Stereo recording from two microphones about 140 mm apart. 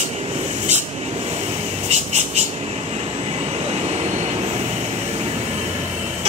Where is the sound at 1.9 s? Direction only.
55° right (ahead or behind).